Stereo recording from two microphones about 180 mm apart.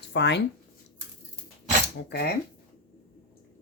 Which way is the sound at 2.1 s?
65° left (ahead or behind).